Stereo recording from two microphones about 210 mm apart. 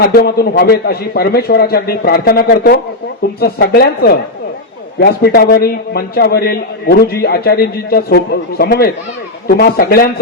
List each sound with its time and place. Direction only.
0.1 s a man's voice: 45° left (ahead or behind)